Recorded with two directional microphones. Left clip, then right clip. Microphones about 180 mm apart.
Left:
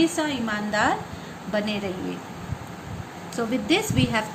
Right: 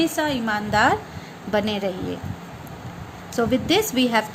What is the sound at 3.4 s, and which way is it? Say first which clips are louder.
Speech: right 4 dB; 60° right (ahead or behind).